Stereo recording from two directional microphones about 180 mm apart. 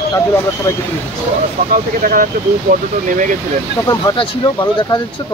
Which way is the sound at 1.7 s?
50° right (ahead or behind).